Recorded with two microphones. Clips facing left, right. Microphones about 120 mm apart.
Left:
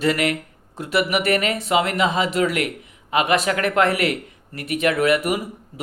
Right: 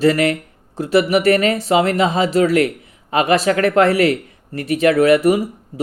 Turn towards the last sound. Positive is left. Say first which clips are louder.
# right 7 dB
turn(degrees=-35)  # may be behind; listen again after turning